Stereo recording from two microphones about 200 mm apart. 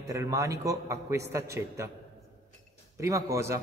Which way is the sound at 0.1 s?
15° right (ahead or behind).